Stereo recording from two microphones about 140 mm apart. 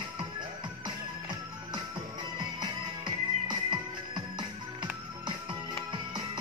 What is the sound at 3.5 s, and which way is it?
Music, 35° right (ahead or behind).